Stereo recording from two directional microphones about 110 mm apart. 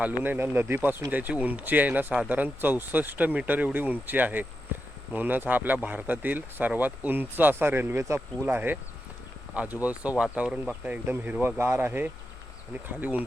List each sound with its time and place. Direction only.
0.0 s speech: 15° right (ahead or behind)
4.7 s a sound: 15° right (ahead or behind)
5.1 s speech: 15° right (ahead or behind)
9.8 s speech: 10° right (ahead or behind)